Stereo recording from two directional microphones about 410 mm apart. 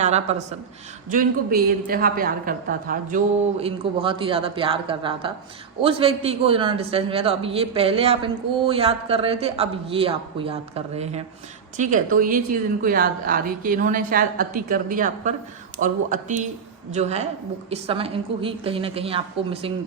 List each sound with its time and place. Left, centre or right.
0.0 s a woman's voice: centre